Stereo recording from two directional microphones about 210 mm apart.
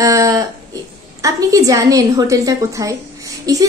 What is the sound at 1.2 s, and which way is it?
A woman's voice, 15° right (ahead or behind).